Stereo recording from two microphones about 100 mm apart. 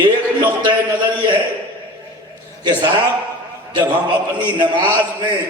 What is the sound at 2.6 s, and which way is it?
Speech, 45° right (ahead or behind).